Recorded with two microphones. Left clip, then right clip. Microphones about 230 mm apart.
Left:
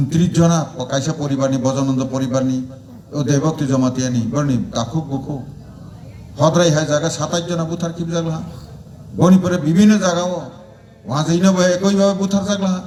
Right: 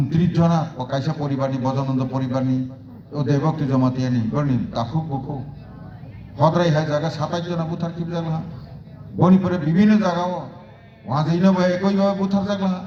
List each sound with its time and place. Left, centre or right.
0.1 s a man's voice: left